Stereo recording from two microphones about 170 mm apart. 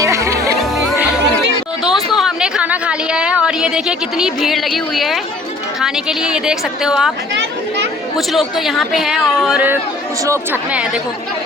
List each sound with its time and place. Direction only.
0.0 s music: 20° right (ahead or behind)
1.8 s a sound: centre (ahead or behind)
5.8 s speech: 5° right (ahead or behind)
8.3 s speech: centre (ahead or behind)